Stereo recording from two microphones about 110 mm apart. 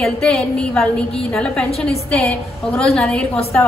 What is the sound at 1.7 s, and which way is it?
Speech, 65° left (ahead or behind).